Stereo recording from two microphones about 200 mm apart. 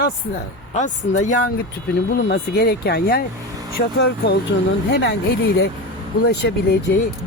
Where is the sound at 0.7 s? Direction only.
40° left (ahead or behind).